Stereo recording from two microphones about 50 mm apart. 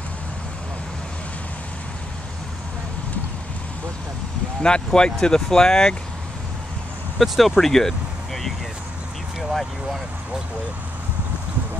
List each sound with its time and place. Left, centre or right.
4.6 s speech: centre
7.2 s speech: centre